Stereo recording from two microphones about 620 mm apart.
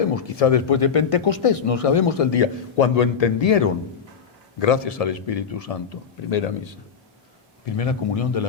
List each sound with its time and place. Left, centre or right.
0.0 s speech: left
7.6 s speech: left